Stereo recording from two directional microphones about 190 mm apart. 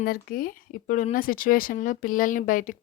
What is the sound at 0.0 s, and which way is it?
A woman's voice, 50° left (ahead or behind).